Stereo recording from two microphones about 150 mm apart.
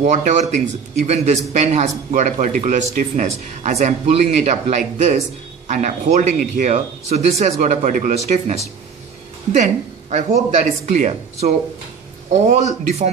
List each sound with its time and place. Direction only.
0.0 s a man's voice: 50° right (ahead or behind)